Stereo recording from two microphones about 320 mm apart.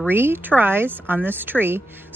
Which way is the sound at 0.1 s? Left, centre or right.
Centre.